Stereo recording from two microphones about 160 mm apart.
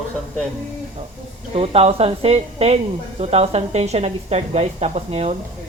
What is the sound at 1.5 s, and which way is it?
Speech, 35° right (ahead or behind).